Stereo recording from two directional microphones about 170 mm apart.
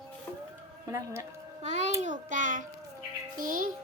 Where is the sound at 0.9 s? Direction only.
15° right (ahead or behind).